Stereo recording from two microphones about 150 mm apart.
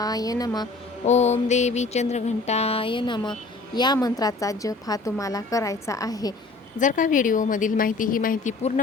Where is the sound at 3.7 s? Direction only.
25° left (ahead or behind).